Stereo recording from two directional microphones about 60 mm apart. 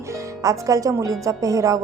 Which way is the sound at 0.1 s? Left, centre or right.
Right.